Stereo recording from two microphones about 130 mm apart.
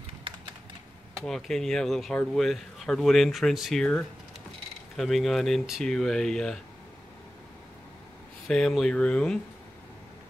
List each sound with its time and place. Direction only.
0.3 s typing: 40° right (ahead or behind)
1.2 s speech: 5° left (ahead or behind)
8.5 s speech: centre (ahead or behind)